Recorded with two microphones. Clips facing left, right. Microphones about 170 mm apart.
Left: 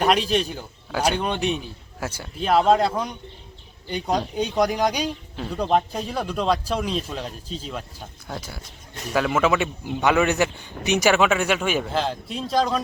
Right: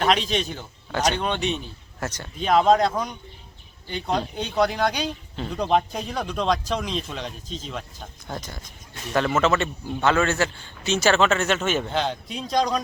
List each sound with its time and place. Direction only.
0.0 s speech: 5° left (ahead or behind)